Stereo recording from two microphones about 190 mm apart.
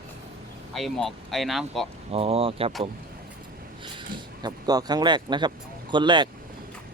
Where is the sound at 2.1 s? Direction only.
30° right (ahead or behind).